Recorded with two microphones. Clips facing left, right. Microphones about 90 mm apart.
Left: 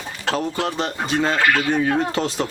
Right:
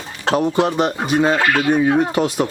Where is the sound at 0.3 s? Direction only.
20° right (ahead or behind).